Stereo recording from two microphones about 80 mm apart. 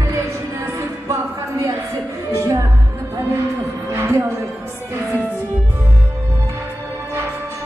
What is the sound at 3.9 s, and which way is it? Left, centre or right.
Music, right.